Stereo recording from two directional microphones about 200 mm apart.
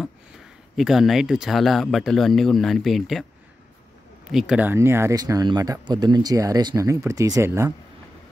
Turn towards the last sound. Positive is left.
turn(degrees=-15)  # may be behind; listen again after turning